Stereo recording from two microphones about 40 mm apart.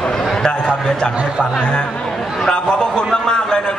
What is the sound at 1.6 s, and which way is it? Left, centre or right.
Speech, left.